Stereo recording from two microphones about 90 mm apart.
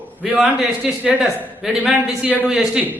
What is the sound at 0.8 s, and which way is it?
A man's voice, 5° right (ahead or behind).